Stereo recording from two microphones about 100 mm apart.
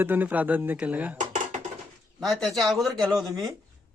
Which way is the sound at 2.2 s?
Centre (ahead or behind).